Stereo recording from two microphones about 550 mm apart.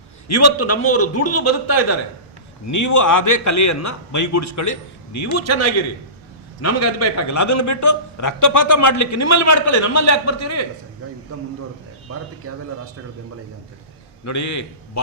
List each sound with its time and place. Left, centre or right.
0.3 s a man's voice: left
11.0 s speech: right
14.3 s a man's voice: left